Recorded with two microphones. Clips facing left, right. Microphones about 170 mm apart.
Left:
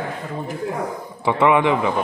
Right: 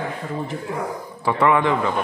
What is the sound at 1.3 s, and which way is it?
Speech, 15° left (ahead or behind).